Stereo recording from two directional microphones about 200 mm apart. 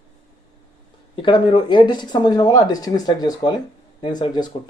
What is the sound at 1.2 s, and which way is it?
Speech, 25° left (ahead or behind).